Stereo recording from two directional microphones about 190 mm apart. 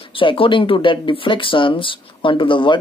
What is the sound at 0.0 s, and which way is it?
A woman's voice, 25° left (ahead or behind).